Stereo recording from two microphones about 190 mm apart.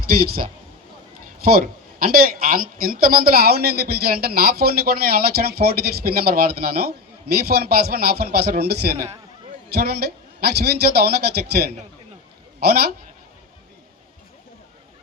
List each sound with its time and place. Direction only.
0.1 s a woman's voice: 50° right (ahead or behind)